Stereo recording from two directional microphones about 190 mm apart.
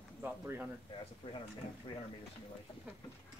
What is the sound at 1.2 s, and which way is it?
Speech, 25° left (ahead or behind).